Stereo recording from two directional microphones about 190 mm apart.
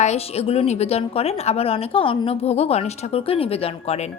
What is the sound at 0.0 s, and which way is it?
A woman's voice, 35° left (ahead or behind).